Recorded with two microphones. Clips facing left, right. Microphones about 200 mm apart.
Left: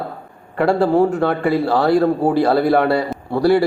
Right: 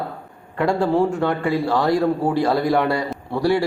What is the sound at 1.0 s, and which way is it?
Speech, 65° left (ahead or behind).